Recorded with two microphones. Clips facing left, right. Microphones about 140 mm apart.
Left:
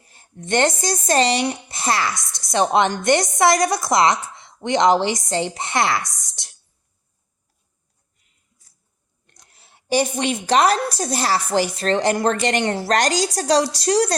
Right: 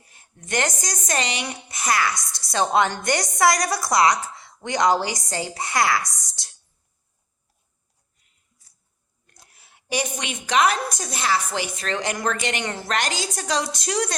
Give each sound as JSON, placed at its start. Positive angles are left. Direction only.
{"t": 0.1, "sound": "speech", "side_deg": 30}
{"t": 9.5, "sound": "a woman's voice", "side_deg": 30}